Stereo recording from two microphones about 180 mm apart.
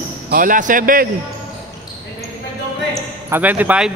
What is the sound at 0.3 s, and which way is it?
Speech, 50° right (ahead or behind).